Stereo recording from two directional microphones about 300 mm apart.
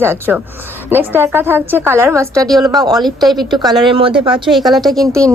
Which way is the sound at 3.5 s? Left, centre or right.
Centre.